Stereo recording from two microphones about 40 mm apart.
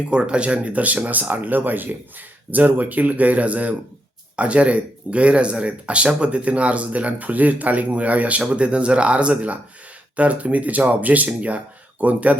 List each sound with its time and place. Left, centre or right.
0.1 s speech: right